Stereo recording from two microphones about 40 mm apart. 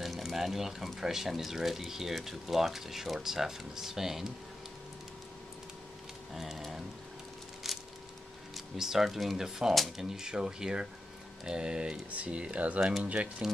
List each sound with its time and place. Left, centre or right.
0.2 s speech: centre
6.3 s speech: centre
7.7 s a sound: centre
8.5 s speech: centre; by 13.3 s right